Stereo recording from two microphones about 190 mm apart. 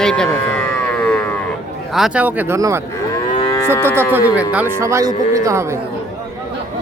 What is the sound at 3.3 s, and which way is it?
Livestock, 25° left (ahead or behind).